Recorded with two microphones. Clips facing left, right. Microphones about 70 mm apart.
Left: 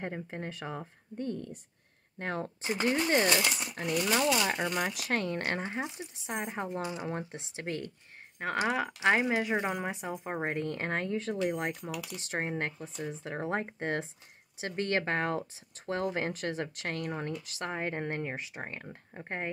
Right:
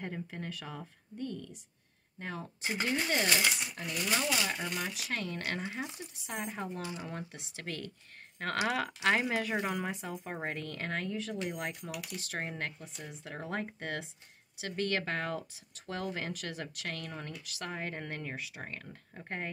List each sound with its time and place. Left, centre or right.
0.0 s speech: left
2.1 s speech: left
3.8 s speech: left
8.4 s speech: centre